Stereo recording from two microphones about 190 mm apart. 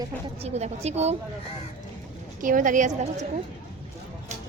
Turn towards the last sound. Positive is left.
turn(degrees=-40)  # may be behind; listen again after turning